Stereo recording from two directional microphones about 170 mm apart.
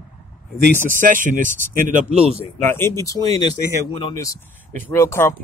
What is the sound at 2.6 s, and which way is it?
Speech, 15° left (ahead or behind).